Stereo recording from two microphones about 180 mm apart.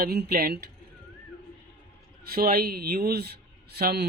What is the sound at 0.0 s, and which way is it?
Speech, 55° right (ahead or behind).